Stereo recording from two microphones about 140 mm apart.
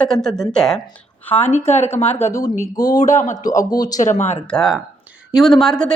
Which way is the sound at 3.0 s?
60° left (ahead or behind).